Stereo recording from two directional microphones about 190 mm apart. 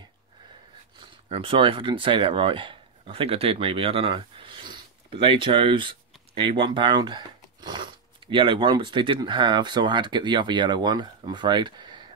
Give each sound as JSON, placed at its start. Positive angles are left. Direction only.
{"t": 0.9, "sound": "speech", "side_deg": -30}